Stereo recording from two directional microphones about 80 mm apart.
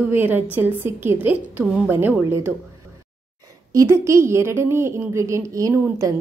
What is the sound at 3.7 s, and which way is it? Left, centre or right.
A woman's voice, right.